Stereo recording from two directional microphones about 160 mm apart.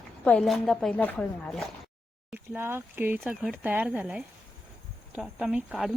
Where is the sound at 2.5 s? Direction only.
15° right (ahead or behind).